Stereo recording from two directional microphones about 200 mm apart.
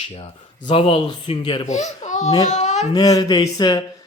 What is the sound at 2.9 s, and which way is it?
Speech, 20° left (ahead or behind).